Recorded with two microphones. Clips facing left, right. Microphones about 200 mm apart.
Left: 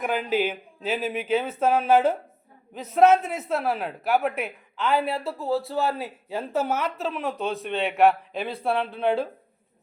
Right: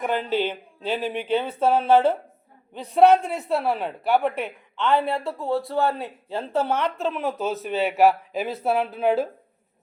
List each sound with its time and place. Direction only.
0.0 s speech: 5° left (ahead or behind)